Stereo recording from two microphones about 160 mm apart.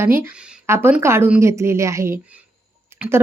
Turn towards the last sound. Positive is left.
turn(degrees=-15)  # may be behind; listen again after turning